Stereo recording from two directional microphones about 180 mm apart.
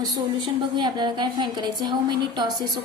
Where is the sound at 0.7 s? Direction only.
25° right (ahead or behind).